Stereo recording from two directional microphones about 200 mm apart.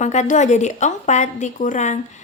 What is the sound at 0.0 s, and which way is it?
A woman's voice, 35° left (ahead or behind).